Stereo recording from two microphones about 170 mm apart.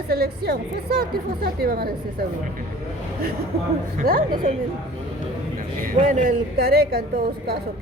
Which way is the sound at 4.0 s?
60° right (ahead or behind).